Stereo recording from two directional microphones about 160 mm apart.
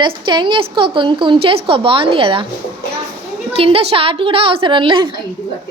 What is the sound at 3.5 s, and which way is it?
A woman's voice, 35° right (ahead or behind).